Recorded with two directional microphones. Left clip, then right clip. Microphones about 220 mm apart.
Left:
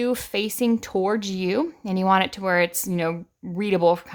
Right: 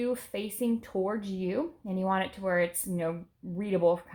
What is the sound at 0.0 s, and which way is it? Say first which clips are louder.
A woman's voice: left 8 dB; 35° left (ahead or behind).